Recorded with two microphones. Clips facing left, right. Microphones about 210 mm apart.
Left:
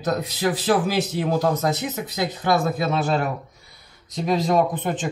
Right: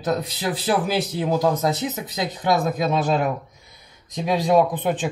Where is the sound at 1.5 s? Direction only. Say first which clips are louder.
Right 1 dB; 15° right (ahead or behind).